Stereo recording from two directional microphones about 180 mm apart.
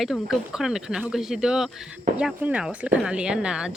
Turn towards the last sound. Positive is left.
turn(degrees=-5)  # may be behind; listen again after turning